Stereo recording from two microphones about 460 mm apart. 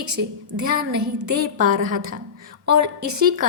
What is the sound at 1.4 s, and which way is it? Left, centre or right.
A woman's voice, centre.